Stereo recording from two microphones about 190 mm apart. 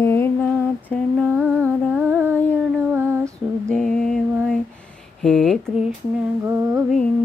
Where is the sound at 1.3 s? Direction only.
5° right (ahead or behind).